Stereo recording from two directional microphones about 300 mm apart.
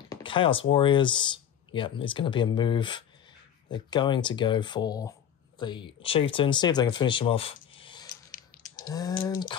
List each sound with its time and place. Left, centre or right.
0.1 s speech: centre
8.7 s a sound: centre
9.2 s speech: centre